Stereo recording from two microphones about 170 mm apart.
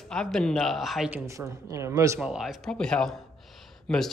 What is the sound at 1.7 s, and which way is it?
Speech, 15° right (ahead or behind).